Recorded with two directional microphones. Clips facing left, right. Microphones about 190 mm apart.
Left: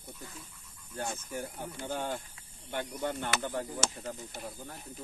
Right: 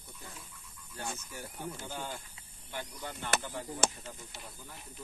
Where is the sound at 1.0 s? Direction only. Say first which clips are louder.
Left 5 dB; 50° left (ahead or behind).